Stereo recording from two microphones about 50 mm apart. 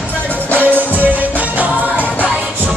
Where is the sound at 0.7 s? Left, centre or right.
Right.